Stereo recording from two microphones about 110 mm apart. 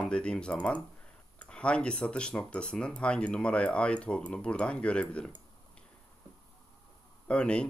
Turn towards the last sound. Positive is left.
turn(degrees=10)  # may be behind; listen again after turning